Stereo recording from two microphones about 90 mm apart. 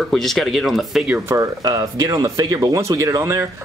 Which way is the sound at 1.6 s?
45° right (ahead or behind).